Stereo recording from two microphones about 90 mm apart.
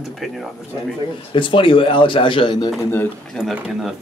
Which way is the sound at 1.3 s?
70° left (ahead or behind).